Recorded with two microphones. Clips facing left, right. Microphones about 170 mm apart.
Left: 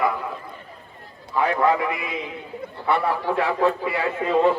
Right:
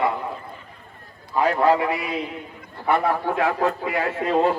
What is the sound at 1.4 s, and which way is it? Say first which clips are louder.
A man's voice: right 2 dB; 35° right (ahead or behind).